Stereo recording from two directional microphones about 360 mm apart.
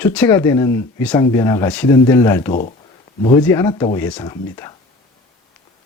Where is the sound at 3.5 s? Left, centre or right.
Centre.